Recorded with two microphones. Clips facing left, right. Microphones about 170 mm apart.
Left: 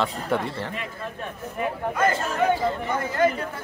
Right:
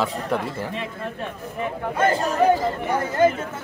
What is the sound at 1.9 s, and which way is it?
Speech, 30° right (ahead or behind).